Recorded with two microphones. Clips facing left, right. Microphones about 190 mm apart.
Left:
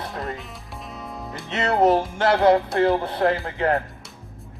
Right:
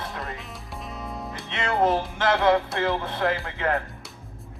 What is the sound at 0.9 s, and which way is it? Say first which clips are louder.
Music: even; centre (ahead or behind).